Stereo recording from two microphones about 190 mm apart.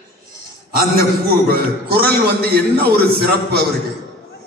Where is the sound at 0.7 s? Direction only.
50° right (ahead or behind).